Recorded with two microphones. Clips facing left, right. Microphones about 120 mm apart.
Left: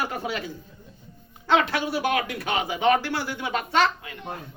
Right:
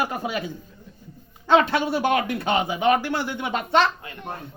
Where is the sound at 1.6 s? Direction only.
25° right (ahead or behind).